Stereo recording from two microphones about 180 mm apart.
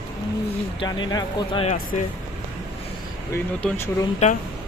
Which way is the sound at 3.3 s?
10° left (ahead or behind).